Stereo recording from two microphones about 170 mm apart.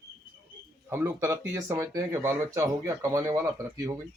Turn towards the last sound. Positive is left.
turn(degrees=-15)  # may be behind; listen again after turning